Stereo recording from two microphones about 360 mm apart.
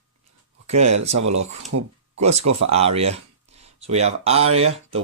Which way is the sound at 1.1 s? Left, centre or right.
Right.